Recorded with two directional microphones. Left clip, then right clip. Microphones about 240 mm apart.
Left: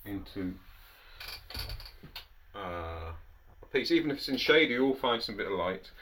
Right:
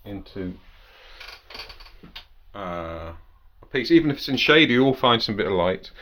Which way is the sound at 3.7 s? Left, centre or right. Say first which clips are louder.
Right 9 dB; right.